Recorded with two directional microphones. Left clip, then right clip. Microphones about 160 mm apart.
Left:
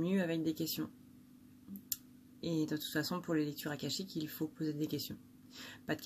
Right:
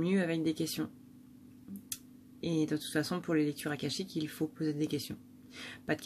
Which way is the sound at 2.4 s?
10° right (ahead or behind).